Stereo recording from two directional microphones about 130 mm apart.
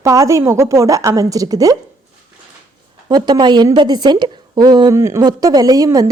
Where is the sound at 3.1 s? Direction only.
35° right (ahead or behind).